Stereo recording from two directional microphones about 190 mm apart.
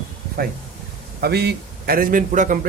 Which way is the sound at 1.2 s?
60° right (ahead or behind).